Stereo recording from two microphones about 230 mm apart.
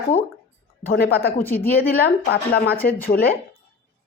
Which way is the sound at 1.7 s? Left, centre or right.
Left.